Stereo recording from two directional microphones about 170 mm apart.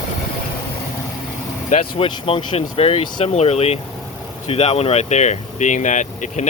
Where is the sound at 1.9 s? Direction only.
35° left (ahead or behind).